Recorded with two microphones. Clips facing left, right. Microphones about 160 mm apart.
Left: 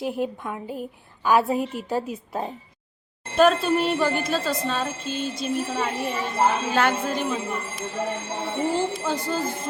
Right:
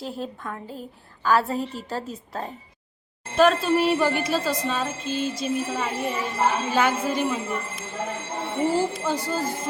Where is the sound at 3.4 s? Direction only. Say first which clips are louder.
Even; centre (ahead or behind).